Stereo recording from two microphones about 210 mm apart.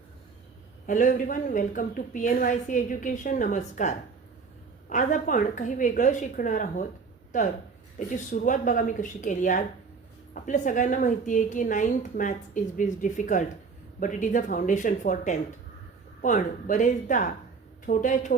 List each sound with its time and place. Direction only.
0.9 s a woman's voice: 40° left (ahead or behind)
7.9 s a woman's voice: 35° left (ahead or behind)